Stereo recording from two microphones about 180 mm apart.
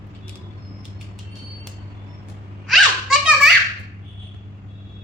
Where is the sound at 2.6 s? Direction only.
Centre (ahead or behind).